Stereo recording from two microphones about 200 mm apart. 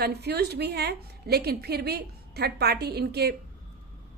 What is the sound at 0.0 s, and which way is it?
A woman's voice, 55° right (ahead or behind).